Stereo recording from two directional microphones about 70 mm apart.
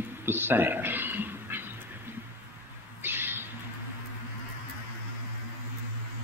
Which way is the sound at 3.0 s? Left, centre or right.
Right.